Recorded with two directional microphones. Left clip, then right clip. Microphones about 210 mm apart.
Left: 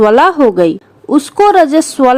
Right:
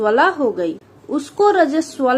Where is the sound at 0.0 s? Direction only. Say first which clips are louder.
Left 8 dB; 50° left (ahead or behind).